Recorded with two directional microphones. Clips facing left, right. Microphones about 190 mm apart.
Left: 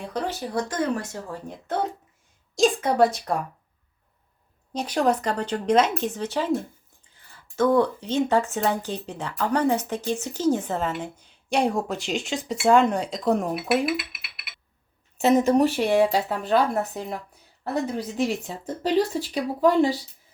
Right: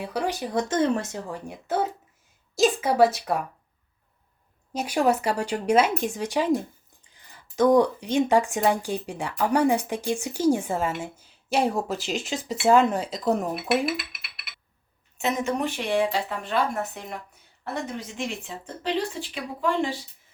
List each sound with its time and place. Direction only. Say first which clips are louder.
0.0 s speech: right 1 dB; 10° right (ahead or behind)
1.5 s speech: right 1 dB; 5° right (ahead or behind)
4.7 s speech: even; 10° right (ahead or behind)
15.2 s speech: left 8 dB; 35° left (ahead or behind)